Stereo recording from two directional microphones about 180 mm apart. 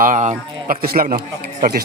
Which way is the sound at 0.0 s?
45° right (ahead or behind).